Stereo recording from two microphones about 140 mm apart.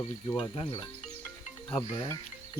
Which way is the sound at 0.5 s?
40° left (ahead or behind).